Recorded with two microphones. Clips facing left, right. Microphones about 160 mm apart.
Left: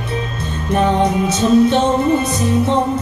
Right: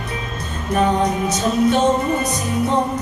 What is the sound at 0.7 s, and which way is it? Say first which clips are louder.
Music: left 3 dB; 25° left (ahead or behind).